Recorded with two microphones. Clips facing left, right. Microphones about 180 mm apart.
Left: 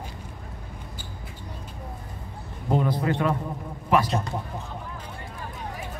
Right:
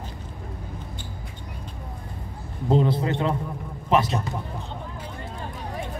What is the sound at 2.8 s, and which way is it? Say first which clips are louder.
Speech: even; 25° right (ahead or behind).